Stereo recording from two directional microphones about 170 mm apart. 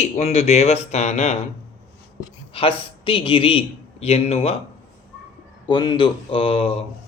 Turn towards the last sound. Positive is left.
turn(degrees=35)  # may be behind; listen again after turning